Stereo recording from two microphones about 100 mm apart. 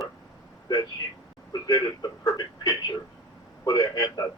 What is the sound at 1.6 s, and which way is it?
A man's voice, 35° left (ahead or behind).